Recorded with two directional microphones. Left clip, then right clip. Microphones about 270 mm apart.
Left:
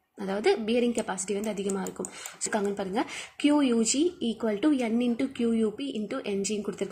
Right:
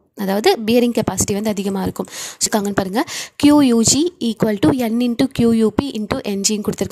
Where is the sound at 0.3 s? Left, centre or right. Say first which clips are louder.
Right 10 dB; right.